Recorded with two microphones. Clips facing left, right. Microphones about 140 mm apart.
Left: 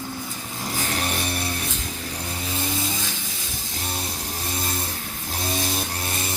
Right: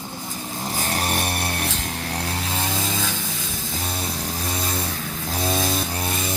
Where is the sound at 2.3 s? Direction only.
90° right.